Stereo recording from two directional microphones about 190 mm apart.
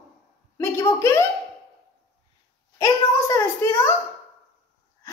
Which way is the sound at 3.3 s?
15° left (ahead or behind).